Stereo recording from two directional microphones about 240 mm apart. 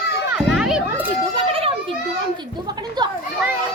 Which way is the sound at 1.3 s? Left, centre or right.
Right.